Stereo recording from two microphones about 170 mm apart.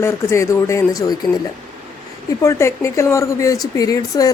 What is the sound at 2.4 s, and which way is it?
Speech, 15° left (ahead or behind).